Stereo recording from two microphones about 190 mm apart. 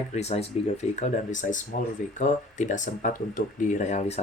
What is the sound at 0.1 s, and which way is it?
Speech, 35° left (ahead or behind).